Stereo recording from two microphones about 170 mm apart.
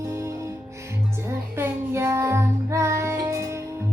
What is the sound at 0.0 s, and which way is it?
Music, 15° right (ahead or behind).